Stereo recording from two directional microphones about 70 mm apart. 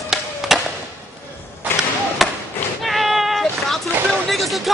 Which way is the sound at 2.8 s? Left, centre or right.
Centre.